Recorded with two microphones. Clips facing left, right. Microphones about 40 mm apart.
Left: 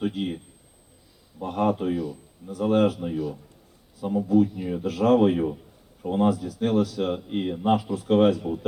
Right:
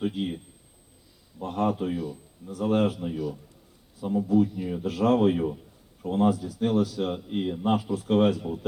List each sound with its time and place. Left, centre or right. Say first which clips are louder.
0.2 s speech: left 1 dB; centre
1.5 s speech: left 3 dB; left
3.0 s speech: left 2 dB; centre
4.9 s speech: left 3 dB; left
5.3 s speech: left 2 dB; centre
6.2 s speech: even; left
6.6 s speech: left 2 dB; left
7.8 s speech: even; left
8.0 s speech: left 3 dB; left